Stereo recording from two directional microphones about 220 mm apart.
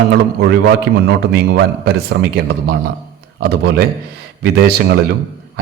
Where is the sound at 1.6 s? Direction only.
50° right (ahead or behind).